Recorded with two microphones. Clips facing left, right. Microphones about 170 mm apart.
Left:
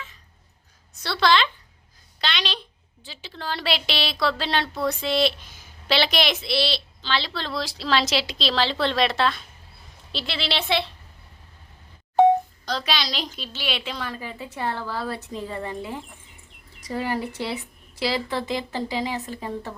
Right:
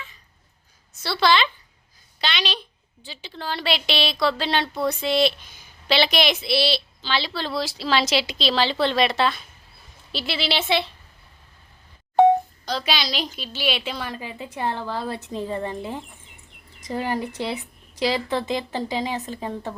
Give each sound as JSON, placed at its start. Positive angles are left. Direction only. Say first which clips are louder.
{"t": 1.0, "sound": "a woman's voice", "louder": "right 1 dB", "side_deg": -5}
{"t": 12.6, "sound": "a woman's voice", "louder": "right 1 dB", "side_deg": -5}